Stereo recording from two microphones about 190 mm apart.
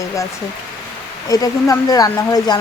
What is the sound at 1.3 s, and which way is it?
Speech, 20° left (ahead or behind).